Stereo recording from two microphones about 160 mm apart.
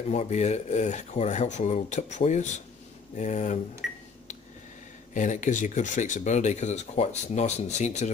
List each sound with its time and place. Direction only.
0.1 s speech: 45° left (ahead or behind)
3.8 s a sound: centre (ahead or behind)
5.1 s speech: 50° left (ahead or behind)